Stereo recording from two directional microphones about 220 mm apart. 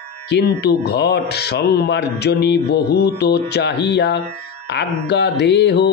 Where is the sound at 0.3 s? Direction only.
50° left (ahead or behind).